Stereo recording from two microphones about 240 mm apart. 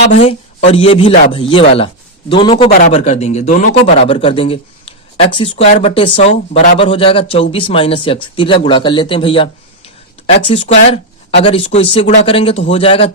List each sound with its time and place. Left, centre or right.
0.1 s speech: left